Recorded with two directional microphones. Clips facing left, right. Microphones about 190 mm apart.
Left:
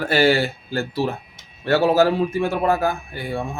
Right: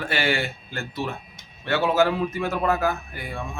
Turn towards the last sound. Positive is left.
turn(degrees=35)  # may be behind; listen again after turning